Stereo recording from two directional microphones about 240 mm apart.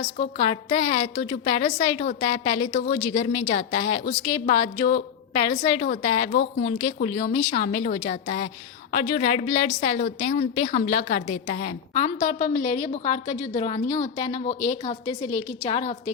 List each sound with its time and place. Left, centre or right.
0.2 s a woman's voice: left
6.7 s a woman's voice: left